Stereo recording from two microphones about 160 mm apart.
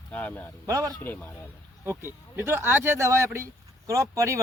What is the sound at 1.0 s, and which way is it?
Speech, 10° left (ahead or behind).